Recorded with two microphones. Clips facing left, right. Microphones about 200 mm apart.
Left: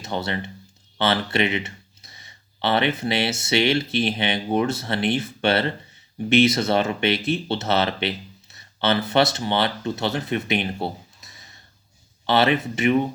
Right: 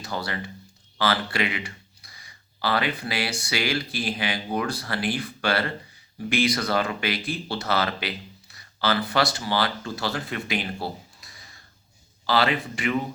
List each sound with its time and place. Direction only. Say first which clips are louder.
0.0 s speech: left 4 dB; 25° left (ahead or behind)